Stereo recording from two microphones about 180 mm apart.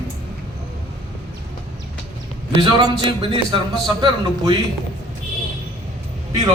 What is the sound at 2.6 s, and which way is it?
Speech, 25° right (ahead or behind).